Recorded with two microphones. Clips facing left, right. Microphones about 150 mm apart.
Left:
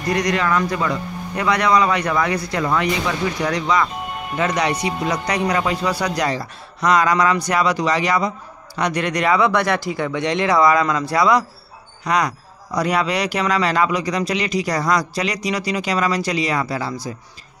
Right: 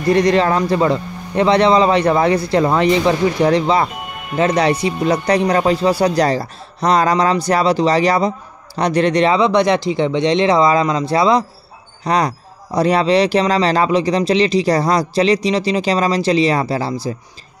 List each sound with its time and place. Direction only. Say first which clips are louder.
0.0 s a man's voice: right 7 dB; 30° right (ahead or behind)